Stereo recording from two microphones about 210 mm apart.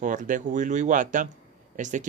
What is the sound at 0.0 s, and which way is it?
Speech, 40° right (ahead or behind).